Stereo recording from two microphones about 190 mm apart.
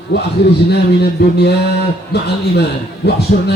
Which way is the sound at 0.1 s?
65° left (ahead or behind).